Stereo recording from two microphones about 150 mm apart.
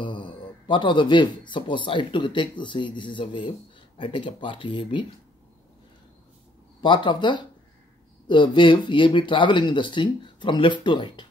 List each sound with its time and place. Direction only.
0.0 s speech: 30° left (ahead or behind)
6.8 s speech: 30° left (ahead or behind)